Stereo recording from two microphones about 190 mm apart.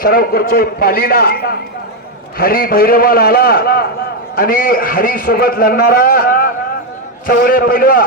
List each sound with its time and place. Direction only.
0.0 s a man's voice: 50° left (ahead or behind)